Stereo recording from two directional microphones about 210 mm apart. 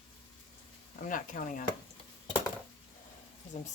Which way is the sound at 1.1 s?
40° left (ahead or behind).